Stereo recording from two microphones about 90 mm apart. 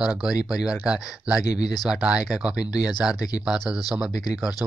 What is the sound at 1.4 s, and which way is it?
Speech, 45° left (ahead or behind).